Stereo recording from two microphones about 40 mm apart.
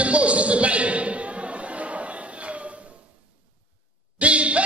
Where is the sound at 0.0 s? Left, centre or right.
Right.